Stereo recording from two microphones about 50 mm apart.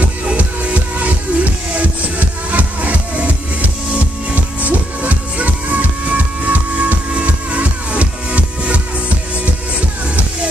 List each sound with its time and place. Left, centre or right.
0.9 s music: right